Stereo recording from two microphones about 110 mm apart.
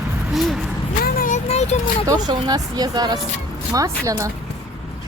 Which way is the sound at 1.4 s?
85° left.